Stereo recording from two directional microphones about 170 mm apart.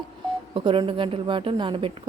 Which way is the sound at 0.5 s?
30° right (ahead or behind).